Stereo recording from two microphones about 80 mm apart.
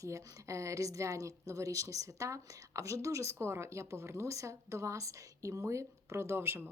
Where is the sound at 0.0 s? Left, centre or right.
Right.